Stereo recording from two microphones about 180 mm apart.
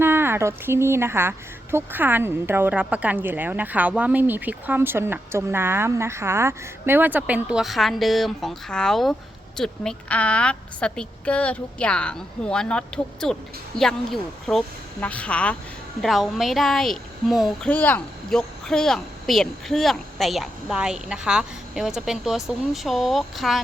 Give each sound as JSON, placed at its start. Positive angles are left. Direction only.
{"t": 0.0, "sound": "speech", "side_deg": -10}